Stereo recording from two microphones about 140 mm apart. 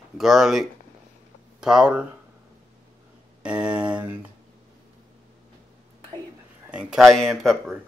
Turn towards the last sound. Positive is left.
turn(degrees=0)  # may be behind; listen again after turning